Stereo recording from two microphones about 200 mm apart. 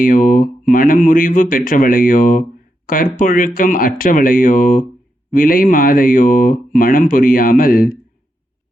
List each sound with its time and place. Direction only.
0.0 s speech: 40° left (ahead or behind)